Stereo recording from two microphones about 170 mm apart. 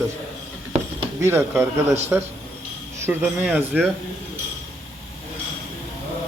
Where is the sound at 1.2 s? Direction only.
15° right (ahead or behind).